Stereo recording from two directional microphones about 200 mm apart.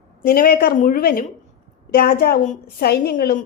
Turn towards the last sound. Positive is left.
turn(degrees=50)  # may be behind; listen again after turning